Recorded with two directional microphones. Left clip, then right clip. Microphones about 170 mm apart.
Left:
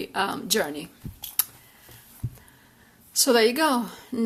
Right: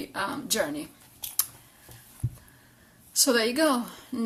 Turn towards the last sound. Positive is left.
turn(degrees=30)  # may be behind; listen again after turning